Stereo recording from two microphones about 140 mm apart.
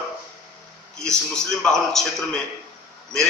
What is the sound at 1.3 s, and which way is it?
A man's voice, 5° left (ahead or behind).